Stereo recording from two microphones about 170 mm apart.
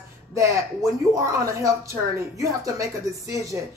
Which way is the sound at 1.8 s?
15° right (ahead or behind).